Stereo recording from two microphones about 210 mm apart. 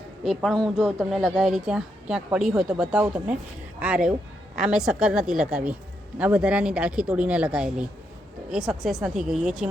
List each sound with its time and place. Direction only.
0.3 s speech: centre (ahead or behind)